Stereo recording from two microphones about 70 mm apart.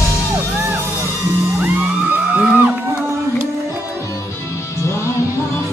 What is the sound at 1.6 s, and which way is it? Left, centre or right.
Music, right.